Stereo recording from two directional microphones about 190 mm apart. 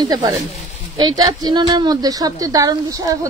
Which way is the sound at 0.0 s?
20° right (ahead or behind).